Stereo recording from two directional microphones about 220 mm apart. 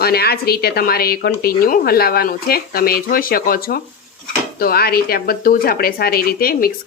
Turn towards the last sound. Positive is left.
turn(degrees=40)  # may be behind; listen again after turning